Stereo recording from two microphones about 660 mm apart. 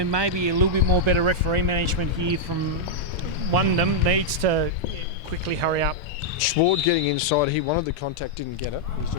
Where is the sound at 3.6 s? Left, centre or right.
Right.